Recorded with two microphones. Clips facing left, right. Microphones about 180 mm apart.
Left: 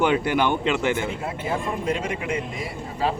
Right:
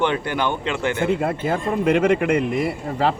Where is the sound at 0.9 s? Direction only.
65° right (ahead or behind).